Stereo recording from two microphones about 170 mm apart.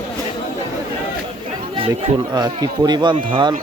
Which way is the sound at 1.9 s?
25° right (ahead or behind).